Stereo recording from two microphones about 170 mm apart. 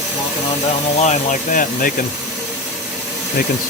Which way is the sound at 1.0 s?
45° left (ahead or behind).